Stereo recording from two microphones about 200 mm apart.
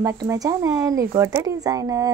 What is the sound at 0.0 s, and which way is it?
Speech, 20° right (ahead or behind).